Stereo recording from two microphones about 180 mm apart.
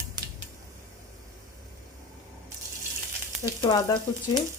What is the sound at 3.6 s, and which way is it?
Speech, 25° left (ahead or behind).